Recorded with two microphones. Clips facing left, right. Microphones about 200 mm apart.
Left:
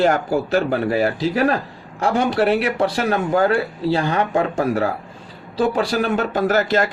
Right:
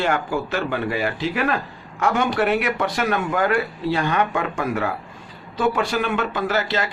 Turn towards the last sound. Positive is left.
turn(degrees=45)  # may be behind; listen again after turning